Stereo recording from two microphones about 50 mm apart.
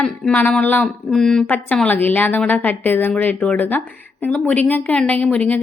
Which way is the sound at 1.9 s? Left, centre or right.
Left.